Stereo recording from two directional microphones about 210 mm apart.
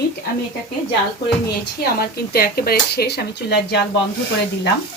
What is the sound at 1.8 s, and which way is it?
A woman's voice, 45° left (ahead or behind).